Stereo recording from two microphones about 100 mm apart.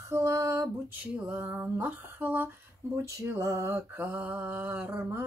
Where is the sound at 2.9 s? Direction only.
30° right (ahead or behind).